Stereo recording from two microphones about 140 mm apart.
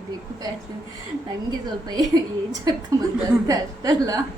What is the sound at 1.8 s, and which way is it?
Speech, 30° right (ahead or behind).